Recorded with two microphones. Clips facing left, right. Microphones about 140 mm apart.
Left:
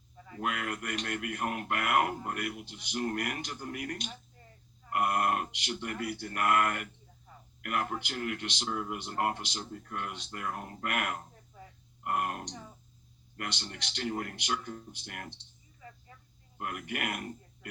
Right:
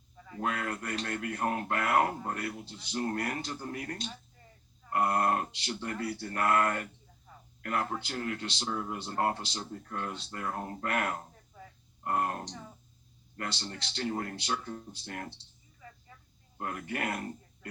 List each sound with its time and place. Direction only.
0.3 s speech: 30° right (ahead or behind)
16.6 s speech: 30° right (ahead or behind)